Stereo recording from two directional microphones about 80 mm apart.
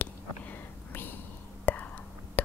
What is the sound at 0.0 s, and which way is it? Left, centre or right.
Whispering, left.